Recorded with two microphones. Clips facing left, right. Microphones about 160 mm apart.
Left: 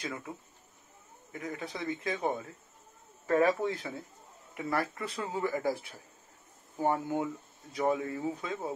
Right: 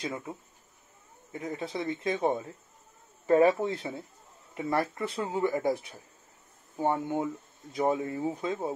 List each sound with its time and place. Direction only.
0.0 s speech: 20° right (ahead or behind)